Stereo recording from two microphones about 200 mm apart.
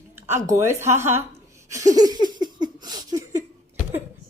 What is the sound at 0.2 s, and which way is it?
A woman's voice, 15° right (ahead or behind).